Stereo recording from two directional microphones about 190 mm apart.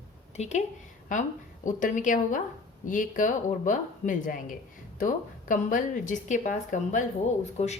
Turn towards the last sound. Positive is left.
turn(degrees=35)  # may be behind; listen again after turning